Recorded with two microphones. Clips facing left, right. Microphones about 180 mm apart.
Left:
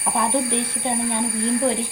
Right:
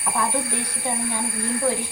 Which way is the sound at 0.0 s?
20° left (ahead or behind).